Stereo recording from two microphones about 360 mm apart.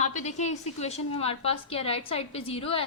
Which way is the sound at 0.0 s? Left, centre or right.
Centre.